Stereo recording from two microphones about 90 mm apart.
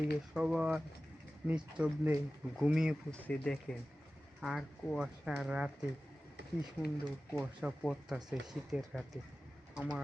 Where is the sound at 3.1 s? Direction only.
10° left (ahead or behind).